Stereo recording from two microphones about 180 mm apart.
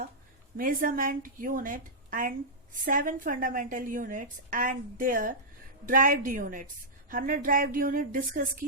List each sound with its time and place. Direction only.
0.5 s a woman's voice: 50° right (ahead or behind)